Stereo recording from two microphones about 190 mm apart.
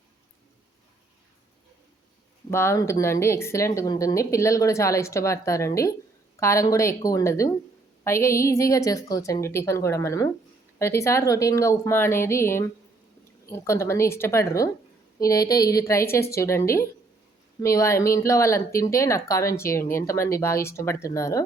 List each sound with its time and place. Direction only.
2.5 s speech: 15° left (ahead or behind)